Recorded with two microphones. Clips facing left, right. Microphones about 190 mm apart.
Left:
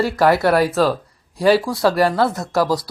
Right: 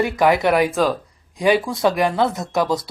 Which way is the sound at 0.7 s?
5° left (ahead or behind).